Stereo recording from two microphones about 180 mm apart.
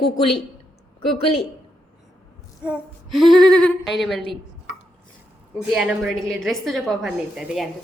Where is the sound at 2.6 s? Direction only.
5° right (ahead or behind).